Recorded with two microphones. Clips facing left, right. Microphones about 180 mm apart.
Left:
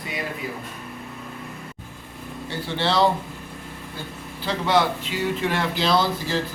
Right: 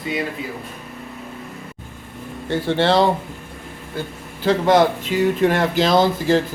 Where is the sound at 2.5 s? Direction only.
55° right (ahead or behind).